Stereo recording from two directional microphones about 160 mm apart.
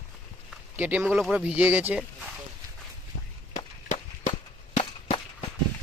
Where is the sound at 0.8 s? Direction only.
10° right (ahead or behind).